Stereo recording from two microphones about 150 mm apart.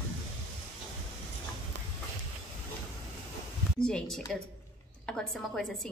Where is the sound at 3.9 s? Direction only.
5° left (ahead or behind).